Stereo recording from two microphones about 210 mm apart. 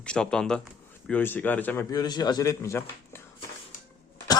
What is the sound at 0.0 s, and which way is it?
Speech, 5° left (ahead or behind).